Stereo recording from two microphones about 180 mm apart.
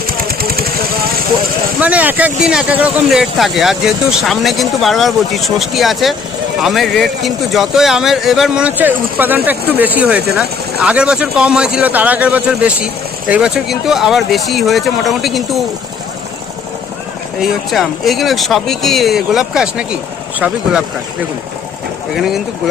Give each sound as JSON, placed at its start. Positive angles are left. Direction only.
{"t": 0.3, "sound": "vehicle", "side_deg": -55}
{"t": 1.8, "sound": "speech", "side_deg": -10}
{"t": 17.4, "sound": "speech", "side_deg": 0}
{"t": 22.1, "sound": "speech", "side_deg": 0}